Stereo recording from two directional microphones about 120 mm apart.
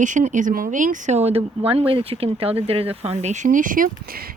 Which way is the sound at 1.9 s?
55° right (ahead or behind).